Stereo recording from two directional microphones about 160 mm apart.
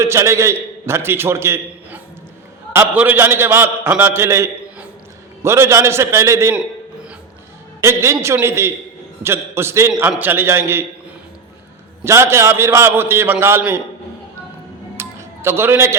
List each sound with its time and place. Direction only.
0.0 s a man's voice: 15° right (ahead or behind)
7.8 s a man's voice: 15° right (ahead or behind)
12.0 s a man's voice: 15° right (ahead or behind)
14.9 s music: 15° right (ahead or behind)